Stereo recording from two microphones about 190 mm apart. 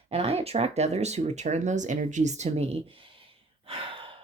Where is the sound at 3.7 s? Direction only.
30° right (ahead or behind).